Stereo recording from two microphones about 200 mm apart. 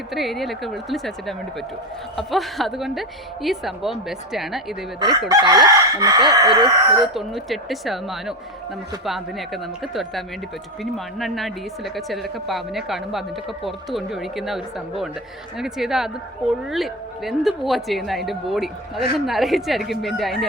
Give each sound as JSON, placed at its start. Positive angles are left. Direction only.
{"t": 0.1, "sound": "speech", "side_deg": 0}
{"t": 5.3, "sound": "speech", "side_deg": -20}
{"t": 7.1, "sound": "speech", "side_deg": 0}